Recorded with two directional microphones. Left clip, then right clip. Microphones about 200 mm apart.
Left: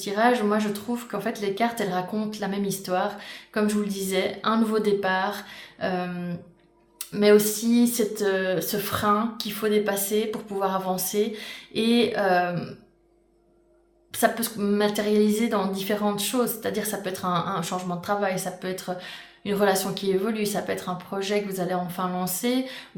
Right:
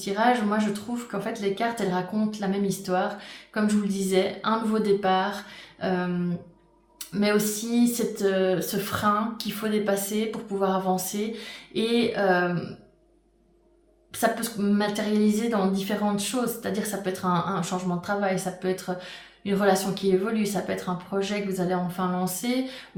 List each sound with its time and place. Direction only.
0.0 s speech: 40° left (ahead or behind)
7.1 s speech: 40° left (ahead or behind)
14.1 s speech: 40° left (ahead or behind)